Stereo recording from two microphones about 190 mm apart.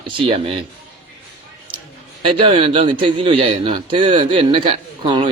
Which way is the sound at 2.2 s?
25° right (ahead or behind).